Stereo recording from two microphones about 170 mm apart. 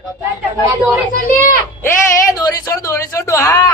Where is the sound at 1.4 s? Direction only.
15° left (ahead or behind).